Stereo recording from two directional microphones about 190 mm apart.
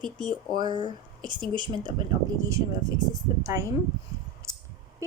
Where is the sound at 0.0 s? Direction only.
25° right (ahead or behind).